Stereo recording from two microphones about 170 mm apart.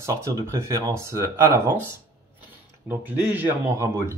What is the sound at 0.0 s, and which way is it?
Speech, 15° right (ahead or behind).